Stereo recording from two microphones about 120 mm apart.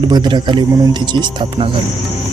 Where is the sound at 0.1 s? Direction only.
40° right (ahead or behind).